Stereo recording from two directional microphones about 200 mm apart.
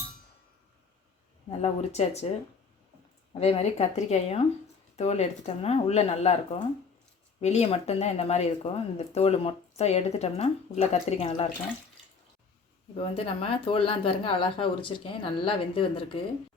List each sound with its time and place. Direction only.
1.5 s speech: 30° left (ahead or behind)
3.4 s speech: 30° left (ahead or behind)
13.0 s speech: 30° left (ahead or behind)